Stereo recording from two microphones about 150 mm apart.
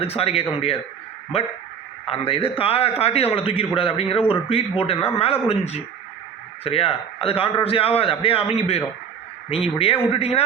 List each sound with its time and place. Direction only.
0.0 s a man's voice: 40° left (ahead or behind)